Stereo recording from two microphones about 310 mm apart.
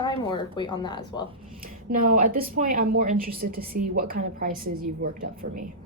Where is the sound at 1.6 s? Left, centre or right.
Right.